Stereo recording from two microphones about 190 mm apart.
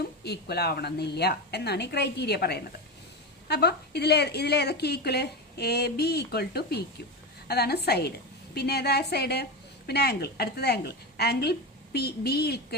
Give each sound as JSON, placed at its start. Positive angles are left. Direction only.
{"t": 0.3, "sound": "a woman's voice", "side_deg": 60}